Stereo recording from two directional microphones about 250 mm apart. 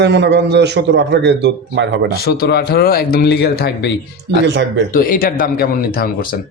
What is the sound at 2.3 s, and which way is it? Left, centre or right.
A man's voice, left.